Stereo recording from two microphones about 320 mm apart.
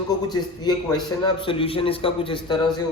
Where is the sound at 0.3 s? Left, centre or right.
Centre.